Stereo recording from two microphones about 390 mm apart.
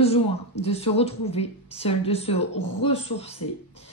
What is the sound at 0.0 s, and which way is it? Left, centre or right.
A woman's voice, centre.